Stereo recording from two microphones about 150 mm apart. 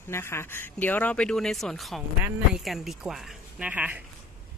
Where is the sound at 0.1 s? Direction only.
15° left (ahead or behind).